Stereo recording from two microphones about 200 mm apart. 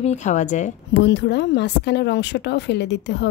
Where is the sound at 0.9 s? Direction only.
60° left (ahead or behind).